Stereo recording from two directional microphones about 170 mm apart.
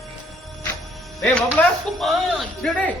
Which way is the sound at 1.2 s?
10° left (ahead or behind).